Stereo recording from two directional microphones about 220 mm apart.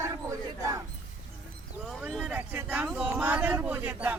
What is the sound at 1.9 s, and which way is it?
A man's voice, centre (ahead or behind).